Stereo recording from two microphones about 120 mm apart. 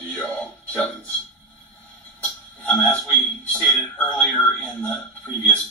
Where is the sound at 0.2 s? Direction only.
10° left (ahead or behind).